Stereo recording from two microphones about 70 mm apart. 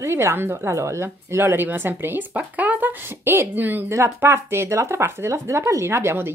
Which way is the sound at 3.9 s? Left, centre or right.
Right.